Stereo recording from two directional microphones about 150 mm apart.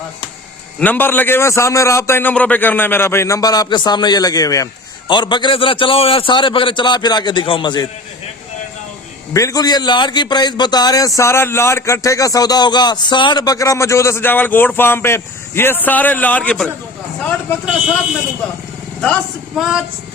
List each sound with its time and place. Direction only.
0.8 s a man's voice: 10° left (ahead or behind); by 7.9 s 30° left (ahead or behind)
9.3 s a man's voice: 20° left (ahead or behind)
19.0 s a sound: 5° left (ahead or behind)